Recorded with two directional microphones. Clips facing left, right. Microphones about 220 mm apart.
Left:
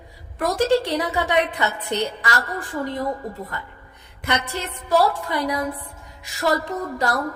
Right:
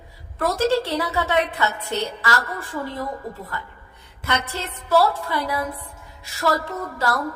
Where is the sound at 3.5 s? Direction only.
20° left (ahead or behind).